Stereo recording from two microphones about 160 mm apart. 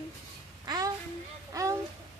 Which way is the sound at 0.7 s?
25° right (ahead or behind).